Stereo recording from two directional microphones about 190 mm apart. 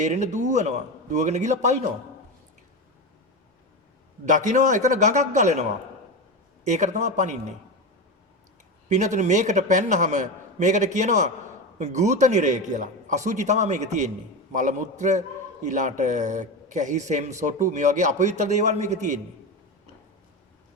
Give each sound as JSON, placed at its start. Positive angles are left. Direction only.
{"t": 0.0, "sound": "a man's voice", "side_deg": -40}
{"t": 4.3, "sound": "a man's voice", "side_deg": -40}
{"t": 6.7, "sound": "a man's voice", "side_deg": -40}
{"t": 8.9, "sound": "a man's voice", "side_deg": -40}